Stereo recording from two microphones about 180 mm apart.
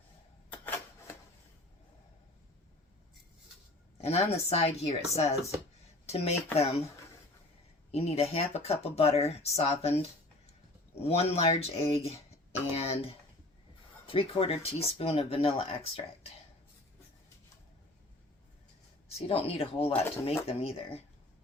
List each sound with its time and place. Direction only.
0.5 s rub: 10° left (ahead or behind)
4.0 s speech: 35° left (ahead or behind)
6.6 s speech: 35° left (ahead or behind)
7.9 s speech: 35° left (ahead or behind)
19.1 s speech: 35° left (ahead or behind)